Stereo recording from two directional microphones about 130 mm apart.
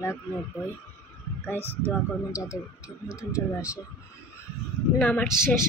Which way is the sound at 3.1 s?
20° left (ahead or behind).